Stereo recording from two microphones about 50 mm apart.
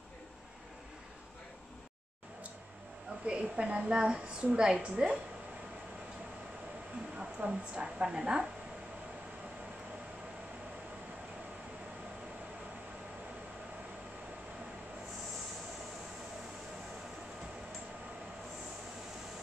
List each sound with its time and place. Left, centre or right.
3.3 s a woman's voice: right
7.2 s a woman's voice: right